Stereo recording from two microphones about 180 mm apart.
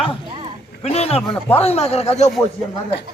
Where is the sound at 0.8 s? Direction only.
35° left (ahead or behind).